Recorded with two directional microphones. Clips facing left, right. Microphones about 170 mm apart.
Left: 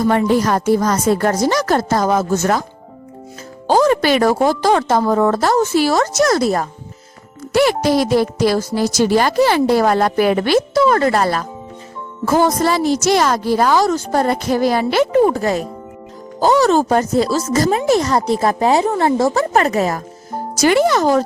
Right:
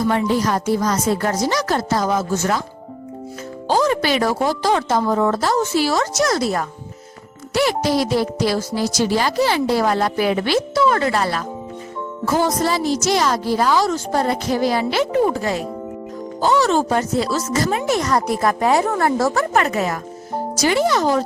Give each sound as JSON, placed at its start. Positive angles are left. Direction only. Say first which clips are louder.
{"t": 0.0, "sound": "a woman's voice", "louder": "left 4 dB", "side_deg": 50}
{"t": 3.7, "sound": "a woman's voice", "louder": "left 4 dB", "side_deg": 50}
{"t": 7.5, "sound": "a woman's voice", "louder": "left 4 dB", "side_deg": 55}
{"t": 19.5, "sound": "speech", "louder": "left 3 dB", "side_deg": 35}
{"t": 20.6, "sound": "a woman's voice", "louder": "left 4 dB", "side_deg": 55}